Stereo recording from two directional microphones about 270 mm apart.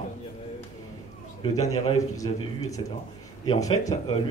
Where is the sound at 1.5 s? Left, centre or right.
Centre.